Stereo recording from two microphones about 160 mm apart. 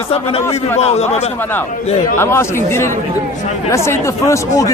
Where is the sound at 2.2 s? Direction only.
15° left (ahead or behind).